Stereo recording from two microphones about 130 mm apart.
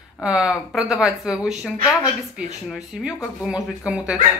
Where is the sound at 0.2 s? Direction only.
5° right (ahead or behind).